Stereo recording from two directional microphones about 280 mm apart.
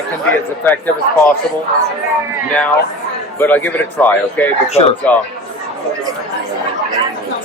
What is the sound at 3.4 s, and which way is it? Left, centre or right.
A man's voice, centre.